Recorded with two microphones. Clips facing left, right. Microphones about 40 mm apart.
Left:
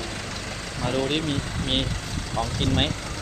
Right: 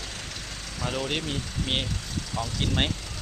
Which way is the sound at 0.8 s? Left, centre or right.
Left.